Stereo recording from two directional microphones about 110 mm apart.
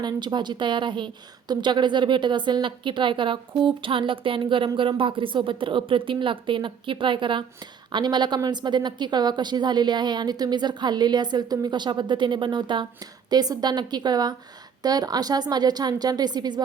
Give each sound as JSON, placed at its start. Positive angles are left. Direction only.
{"t": 0.0, "sound": "a woman's voice", "side_deg": -45}